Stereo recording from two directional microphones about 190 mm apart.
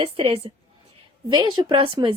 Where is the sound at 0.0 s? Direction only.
30° right (ahead or behind).